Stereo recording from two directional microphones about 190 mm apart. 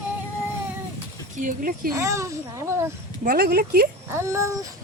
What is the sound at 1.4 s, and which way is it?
Speech, 45° right (ahead or behind).